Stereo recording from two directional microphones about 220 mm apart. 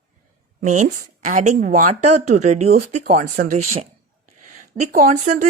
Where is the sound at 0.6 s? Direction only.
35° right (ahead or behind).